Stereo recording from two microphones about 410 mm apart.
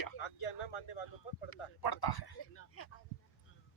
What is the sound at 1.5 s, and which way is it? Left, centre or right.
Speech, left.